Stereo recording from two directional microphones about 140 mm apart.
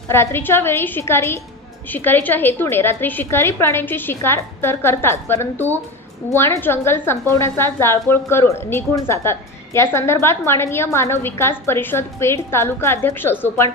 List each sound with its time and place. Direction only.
0.1 s a woman's voice: 15° left (ahead or behind)